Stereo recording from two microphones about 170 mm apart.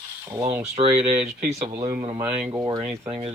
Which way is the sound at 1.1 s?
5° right (ahead or behind).